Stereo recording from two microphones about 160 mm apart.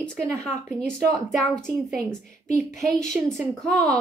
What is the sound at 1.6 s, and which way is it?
Speech, centre (ahead or behind).